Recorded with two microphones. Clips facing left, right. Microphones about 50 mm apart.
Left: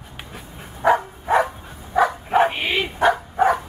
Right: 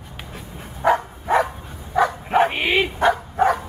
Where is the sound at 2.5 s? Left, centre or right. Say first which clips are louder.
Right 3 dB; centre.